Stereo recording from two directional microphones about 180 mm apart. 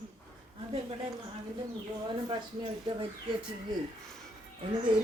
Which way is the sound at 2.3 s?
30° right (ahead or behind).